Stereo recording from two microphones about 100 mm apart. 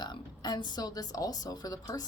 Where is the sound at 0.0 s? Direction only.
45° left (ahead or behind).